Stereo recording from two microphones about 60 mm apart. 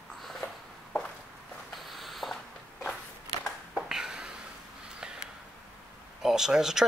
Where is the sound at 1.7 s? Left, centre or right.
Centre.